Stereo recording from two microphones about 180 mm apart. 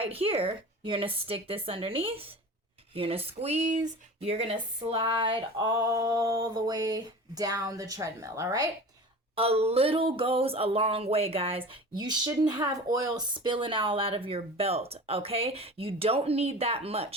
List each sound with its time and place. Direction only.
0.0 s speech: 30° right (ahead or behind)
9.3 s speech: 35° right (ahead or behind)